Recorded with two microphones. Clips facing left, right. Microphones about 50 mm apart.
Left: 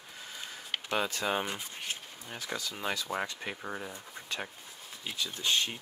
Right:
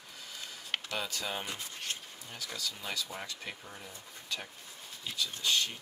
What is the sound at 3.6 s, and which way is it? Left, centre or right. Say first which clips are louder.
Speech: left 8 dB; left.